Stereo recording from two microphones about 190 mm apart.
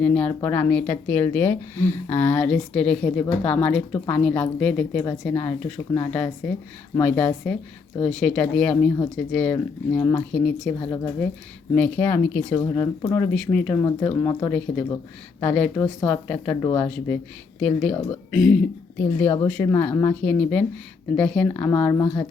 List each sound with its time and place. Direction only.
0.0 s a woman's voice: 10° left (ahead or behind)
12.5 s a woman's voice: 20° left (ahead or behind)